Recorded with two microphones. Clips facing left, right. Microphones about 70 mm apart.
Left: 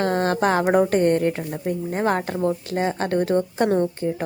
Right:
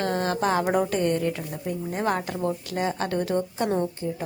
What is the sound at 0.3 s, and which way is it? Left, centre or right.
A woman's voice, left.